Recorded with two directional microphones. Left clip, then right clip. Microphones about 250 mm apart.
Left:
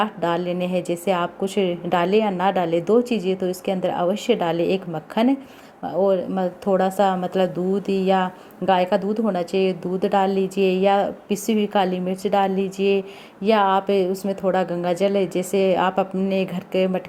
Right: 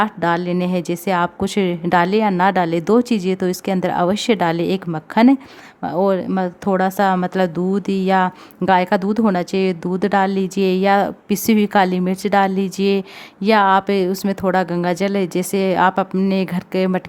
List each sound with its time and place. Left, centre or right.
0.0 s speech: right